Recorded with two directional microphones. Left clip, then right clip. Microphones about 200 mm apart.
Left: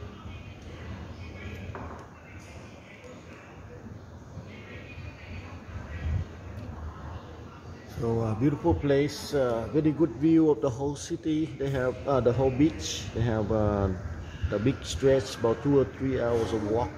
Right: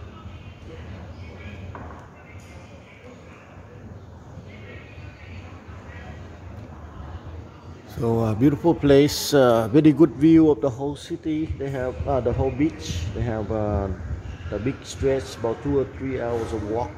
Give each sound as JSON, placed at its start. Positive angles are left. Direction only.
{"t": 8.0, "sound": "speech", "side_deg": -40}
{"t": 10.3, "sound": "a man's voice", "side_deg": -25}
{"t": 10.9, "sound": "speech", "side_deg": -5}